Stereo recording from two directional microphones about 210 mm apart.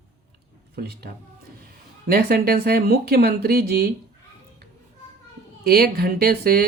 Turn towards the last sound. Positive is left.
turn(degrees=-50)  # may be behind; listen again after turning